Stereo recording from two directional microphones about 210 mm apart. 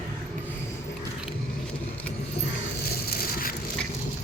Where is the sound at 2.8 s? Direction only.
45° left (ahead or behind).